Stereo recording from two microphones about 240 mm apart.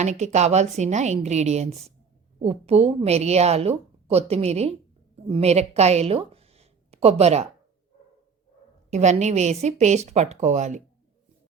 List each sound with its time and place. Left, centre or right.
0.0 s a woman's voice: right
8.9 s a woman's voice: right